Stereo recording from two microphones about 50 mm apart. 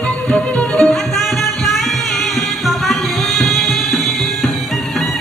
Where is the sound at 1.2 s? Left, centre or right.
Centre.